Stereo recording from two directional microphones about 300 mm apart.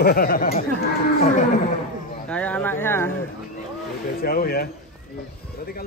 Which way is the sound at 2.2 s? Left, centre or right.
Centre.